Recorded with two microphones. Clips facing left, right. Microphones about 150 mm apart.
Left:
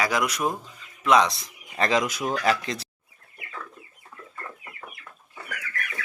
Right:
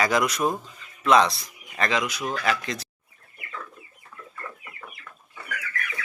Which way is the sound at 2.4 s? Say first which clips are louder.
Left 2 dB; 30° left (ahead or behind).